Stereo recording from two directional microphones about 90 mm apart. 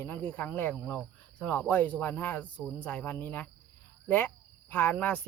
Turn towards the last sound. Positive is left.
turn(degrees=15)  # may be behind; listen again after turning